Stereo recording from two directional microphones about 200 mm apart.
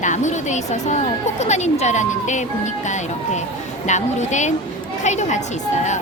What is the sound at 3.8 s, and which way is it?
Speech, 35° left (ahead or behind).